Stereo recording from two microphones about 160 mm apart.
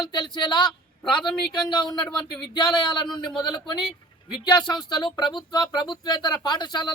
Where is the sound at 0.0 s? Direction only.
30° left (ahead or behind).